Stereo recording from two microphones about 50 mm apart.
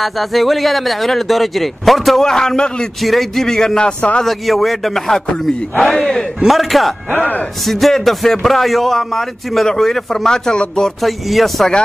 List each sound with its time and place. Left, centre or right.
0.0 s speech: centre
3.0 s speech: centre
4.2 s speech: centre
6.4 s speech: centre
7.1 s speech: left
7.6 s speech: centre
11.0 s speech: centre